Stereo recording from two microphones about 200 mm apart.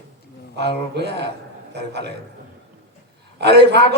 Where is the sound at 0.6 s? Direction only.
55° right (ahead or behind).